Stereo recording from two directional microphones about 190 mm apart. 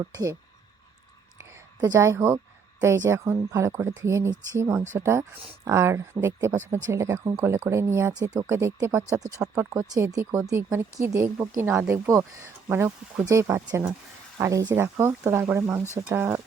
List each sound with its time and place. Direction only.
0.0 s speech: 15° right (ahead or behind)
1.5 s a woman's voice: 15° right (ahead or behind)